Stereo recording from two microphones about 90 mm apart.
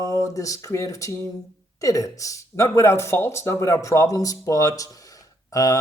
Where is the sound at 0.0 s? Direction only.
35° left (ahead or behind).